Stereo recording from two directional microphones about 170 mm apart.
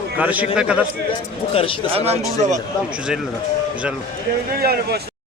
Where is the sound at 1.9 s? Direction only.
35° right (ahead or behind).